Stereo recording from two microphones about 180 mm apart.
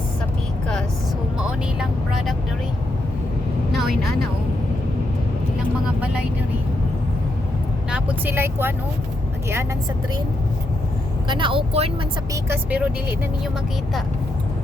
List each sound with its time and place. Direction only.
1.5 s speech: 5° right (ahead or behind)
7.9 s speech: 10° right (ahead or behind)
11.3 s speech: 25° right (ahead or behind)
12.3 s speech: 10° right (ahead or behind)